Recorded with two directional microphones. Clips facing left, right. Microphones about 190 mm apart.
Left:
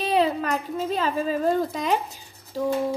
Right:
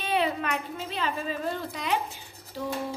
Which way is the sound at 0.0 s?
35° left (ahead or behind).